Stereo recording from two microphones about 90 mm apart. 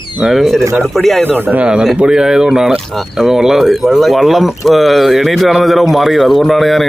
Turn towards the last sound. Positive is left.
turn(degrees=0)  # may be behind; listen again after turning